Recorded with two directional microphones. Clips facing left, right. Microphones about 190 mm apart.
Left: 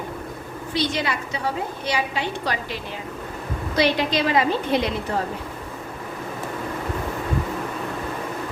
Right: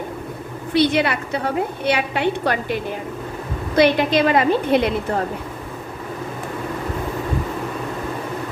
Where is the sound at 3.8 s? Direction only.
55° right (ahead or behind).